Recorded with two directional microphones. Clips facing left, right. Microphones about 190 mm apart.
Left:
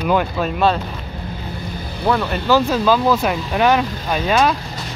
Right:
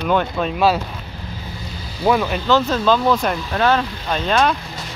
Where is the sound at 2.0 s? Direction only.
10° right (ahead or behind).